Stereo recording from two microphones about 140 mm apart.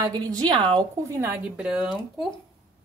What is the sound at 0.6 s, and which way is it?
Speech, 30° right (ahead or behind).